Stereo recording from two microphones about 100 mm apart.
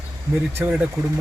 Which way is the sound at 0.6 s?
10° right (ahead or behind).